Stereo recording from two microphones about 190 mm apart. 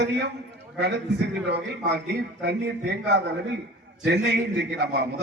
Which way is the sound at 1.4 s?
65° right (ahead or behind).